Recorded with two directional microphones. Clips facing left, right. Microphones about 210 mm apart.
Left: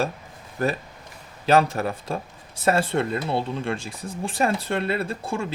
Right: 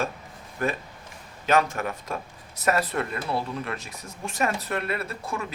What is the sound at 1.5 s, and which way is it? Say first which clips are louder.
Speech: left 4 dB; 35° left (ahead or behind).